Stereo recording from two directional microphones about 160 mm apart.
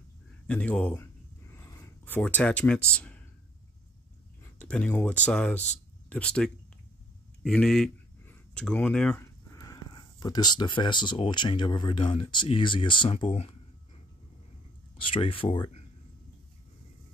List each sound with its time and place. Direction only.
0.5 s a sound: 10° left (ahead or behind)
4.4 s speech: 5° left (ahead or behind)
9.5 s speech: 20° left (ahead or behind); by 13.6 s 35° left (ahead or behind)
15.1 s speech: 35° left (ahead or behind)